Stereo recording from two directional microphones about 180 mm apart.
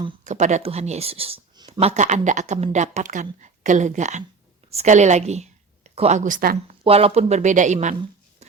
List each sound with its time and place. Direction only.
0.3 s speech: 40° right (ahead or behind)
6.8 s speech: 35° right (ahead or behind)